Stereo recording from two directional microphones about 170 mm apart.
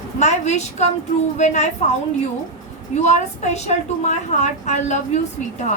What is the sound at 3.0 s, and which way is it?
A woman's voice, 45° left (ahead or behind).